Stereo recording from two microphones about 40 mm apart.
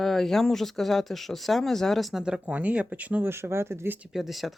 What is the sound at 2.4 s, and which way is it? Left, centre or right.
Speech, right.